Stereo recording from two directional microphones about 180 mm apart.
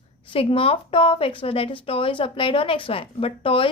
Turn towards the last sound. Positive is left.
turn(degrees=30)  # may be behind; listen again after turning